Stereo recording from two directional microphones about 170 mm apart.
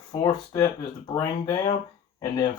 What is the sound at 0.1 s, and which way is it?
Speech, 20° left (ahead or behind).